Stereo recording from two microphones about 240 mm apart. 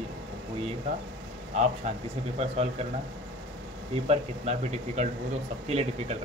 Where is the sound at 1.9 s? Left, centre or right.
Right.